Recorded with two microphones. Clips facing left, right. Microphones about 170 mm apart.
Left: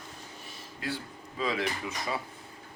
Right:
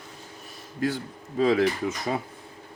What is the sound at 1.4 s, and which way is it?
Speech, 45° right (ahead or behind).